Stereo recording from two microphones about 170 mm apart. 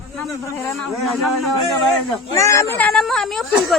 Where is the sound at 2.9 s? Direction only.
Centre (ahead or behind).